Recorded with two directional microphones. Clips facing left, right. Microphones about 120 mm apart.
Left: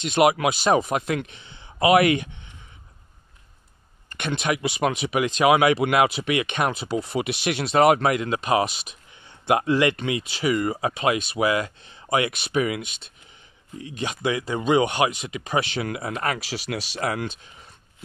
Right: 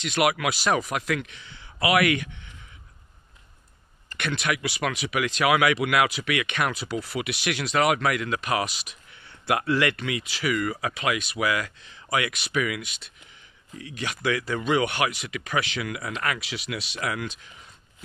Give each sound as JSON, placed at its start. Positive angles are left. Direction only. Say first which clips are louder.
{"t": 0.1, "sound": "speech", "louder": "left 5 dB", "side_deg": 25}
{"t": 4.2, "sound": "speech", "louder": "left 3 dB", "side_deg": 25}